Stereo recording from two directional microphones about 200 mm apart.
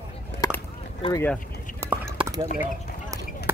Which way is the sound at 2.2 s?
15° right (ahead or behind).